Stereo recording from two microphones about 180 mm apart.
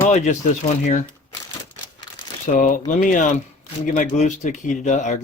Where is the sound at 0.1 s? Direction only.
40° left (ahead or behind).